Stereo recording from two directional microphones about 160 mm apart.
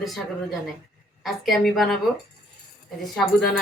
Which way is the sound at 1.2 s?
Centre (ahead or behind).